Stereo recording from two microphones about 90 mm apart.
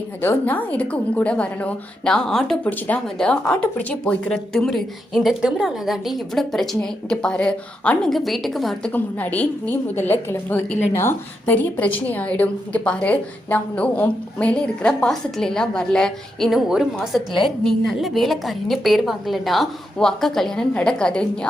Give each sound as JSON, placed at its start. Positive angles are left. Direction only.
{"t": 0.2, "sound": "a woman's voice", "side_deg": 20}
{"t": 2.6, "sound": "a woman's voice", "side_deg": 20}
{"t": 8.9, "sound": "a woman's voice", "side_deg": 20}